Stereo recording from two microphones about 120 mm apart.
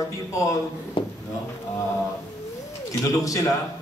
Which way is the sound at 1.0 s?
45° left (ahead or behind).